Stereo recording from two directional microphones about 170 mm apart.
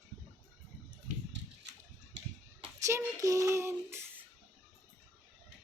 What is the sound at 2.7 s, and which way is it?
Child singing, 20° right (ahead or behind).